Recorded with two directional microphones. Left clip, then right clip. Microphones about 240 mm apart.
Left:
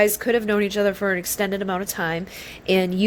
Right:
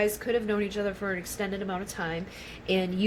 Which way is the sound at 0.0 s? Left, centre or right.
Left.